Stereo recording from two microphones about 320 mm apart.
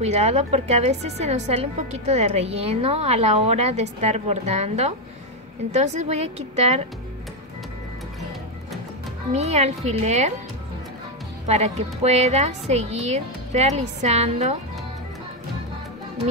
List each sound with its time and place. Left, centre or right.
0.0 s a woman's voice: centre
9.3 s a woman's voice: centre
11.4 s a woman's voice: centre